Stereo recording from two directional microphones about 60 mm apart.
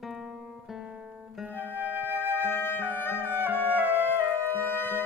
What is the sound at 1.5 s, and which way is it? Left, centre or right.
Flute, right.